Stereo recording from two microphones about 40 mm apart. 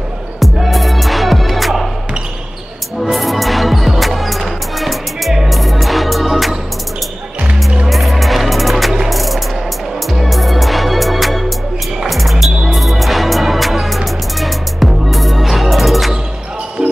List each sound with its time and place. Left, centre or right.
0.4 s music: centre
3.0 s music: centre
7.8 s music: centre
16.8 s basketball bounce: centre